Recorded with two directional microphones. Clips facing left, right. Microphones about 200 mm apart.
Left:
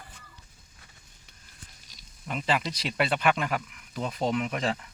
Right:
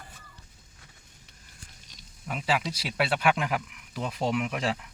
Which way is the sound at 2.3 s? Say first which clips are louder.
Even; 5° right (ahead or behind).